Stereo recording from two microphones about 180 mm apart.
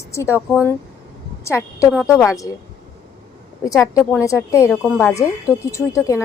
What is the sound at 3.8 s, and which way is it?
Speech, 15° left (ahead or behind).